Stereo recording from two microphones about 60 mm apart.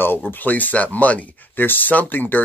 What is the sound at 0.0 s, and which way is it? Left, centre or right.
Speech, left.